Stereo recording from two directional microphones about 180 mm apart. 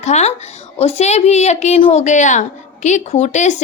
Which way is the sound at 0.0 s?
40° left (ahead or behind).